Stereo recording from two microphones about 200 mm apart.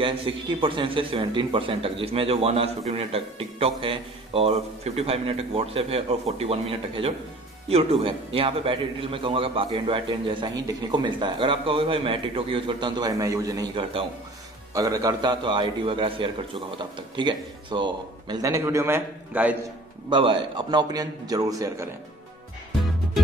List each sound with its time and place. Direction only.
0.0 s a man's voice: 25° right (ahead or behind); by 19.5 s 10° right (ahead or behind)
20.1 s a man's voice: 25° right (ahead or behind)